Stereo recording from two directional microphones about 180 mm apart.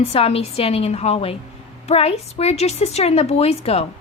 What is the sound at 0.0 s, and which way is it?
A woman's voice, 35° left (ahead or behind).